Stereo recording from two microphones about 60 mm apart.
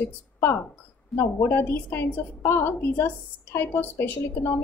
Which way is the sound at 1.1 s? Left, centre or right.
Centre.